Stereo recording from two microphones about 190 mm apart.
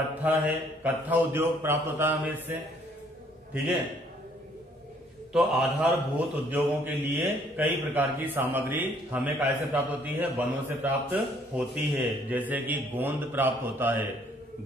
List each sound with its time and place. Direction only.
0.1 s a man's voice: 10° right (ahead or behind)
5.3 s a man's voice: 5° right (ahead or behind)